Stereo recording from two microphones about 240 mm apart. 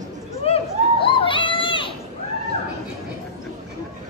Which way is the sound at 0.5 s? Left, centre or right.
Left.